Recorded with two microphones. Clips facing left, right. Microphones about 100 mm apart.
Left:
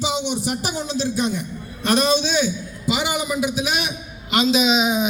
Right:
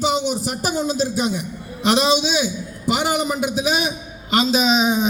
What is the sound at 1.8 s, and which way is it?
Speech, 20° right (ahead or behind).